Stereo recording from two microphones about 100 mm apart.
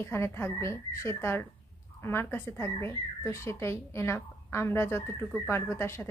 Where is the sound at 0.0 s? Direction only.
25° left (ahead or behind).